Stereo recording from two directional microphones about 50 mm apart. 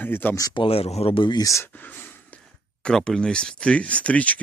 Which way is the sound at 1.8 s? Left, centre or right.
Left.